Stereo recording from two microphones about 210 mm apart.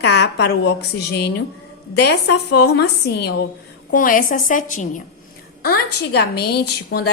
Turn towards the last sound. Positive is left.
turn(degrees=50)  # may be behind; listen again after turning